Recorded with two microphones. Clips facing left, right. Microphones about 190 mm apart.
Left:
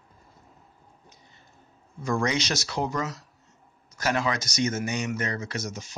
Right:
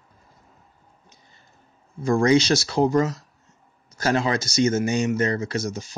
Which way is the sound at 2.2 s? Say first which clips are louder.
Right 9 dB; 30° right (ahead or behind).